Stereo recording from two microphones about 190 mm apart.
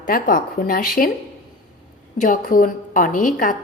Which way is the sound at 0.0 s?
45° left (ahead or behind).